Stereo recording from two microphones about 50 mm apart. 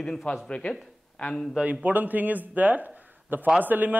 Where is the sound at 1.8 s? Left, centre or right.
Right.